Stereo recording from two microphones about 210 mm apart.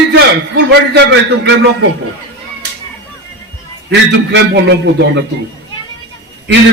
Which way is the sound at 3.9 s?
55° right (ahead or behind).